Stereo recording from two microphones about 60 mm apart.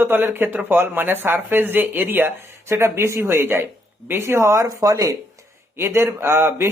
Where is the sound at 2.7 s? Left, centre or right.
Right.